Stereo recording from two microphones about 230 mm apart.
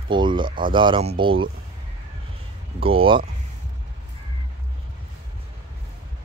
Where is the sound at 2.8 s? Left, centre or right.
Right.